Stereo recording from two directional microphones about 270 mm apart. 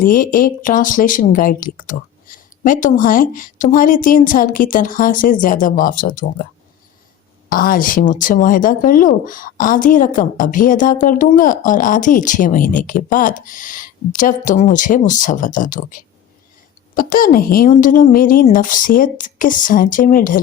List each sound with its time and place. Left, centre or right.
0.0 s speech: left
7.5 s speech: left